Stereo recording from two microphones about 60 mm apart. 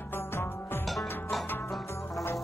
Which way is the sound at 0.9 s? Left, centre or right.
Centre.